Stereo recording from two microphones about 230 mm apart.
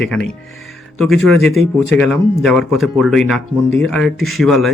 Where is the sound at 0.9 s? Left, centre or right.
Centre.